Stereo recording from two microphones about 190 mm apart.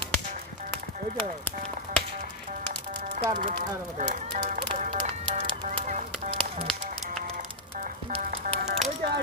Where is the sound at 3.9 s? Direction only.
40° right (ahead or behind).